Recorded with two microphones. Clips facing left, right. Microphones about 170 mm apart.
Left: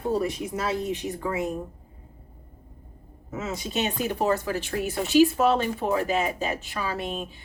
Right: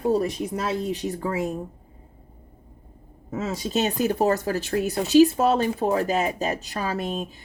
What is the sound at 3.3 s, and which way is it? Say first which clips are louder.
Speech: right 4 dB; 35° right (ahead or behind).